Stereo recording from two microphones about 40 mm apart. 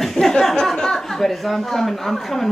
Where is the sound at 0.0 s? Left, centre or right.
Centre.